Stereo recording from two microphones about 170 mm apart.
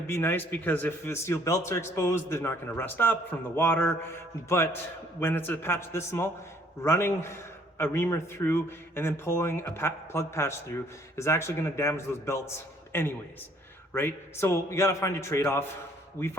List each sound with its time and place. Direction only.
0.1 s a man's voice: 10° left (ahead or behind)